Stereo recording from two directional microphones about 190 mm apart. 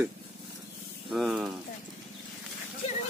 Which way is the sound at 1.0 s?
5° right (ahead or behind).